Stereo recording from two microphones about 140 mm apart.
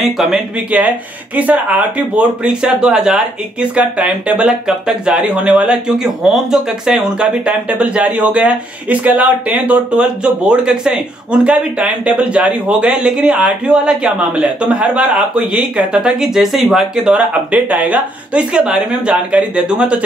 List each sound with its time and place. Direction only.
0.0 s speech: centre (ahead or behind)